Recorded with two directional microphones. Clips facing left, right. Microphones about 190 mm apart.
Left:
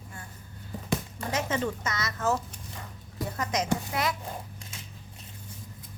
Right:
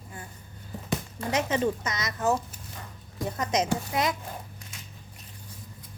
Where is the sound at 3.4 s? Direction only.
20° right (ahead or behind).